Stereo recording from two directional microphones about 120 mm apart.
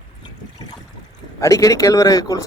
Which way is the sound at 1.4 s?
30° left (ahead or behind).